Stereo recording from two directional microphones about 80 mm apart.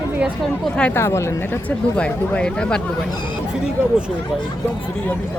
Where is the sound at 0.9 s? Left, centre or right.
Left.